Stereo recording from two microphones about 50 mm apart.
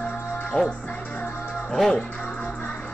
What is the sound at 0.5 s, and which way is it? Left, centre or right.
Music, left.